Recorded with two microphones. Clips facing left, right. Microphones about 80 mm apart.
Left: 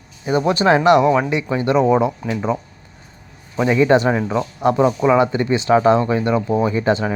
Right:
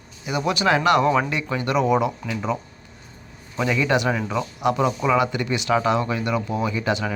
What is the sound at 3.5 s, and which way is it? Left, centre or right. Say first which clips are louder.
Speech: left 7 dB; left.